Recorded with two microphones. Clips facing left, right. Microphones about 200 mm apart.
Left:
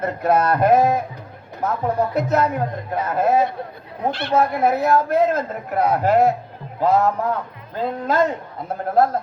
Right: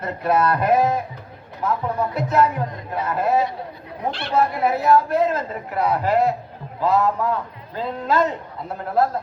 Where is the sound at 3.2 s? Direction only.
50° left (ahead or behind).